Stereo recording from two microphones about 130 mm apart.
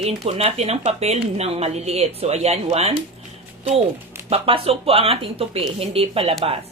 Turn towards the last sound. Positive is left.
turn(degrees=-45)  # may be behind; listen again after turning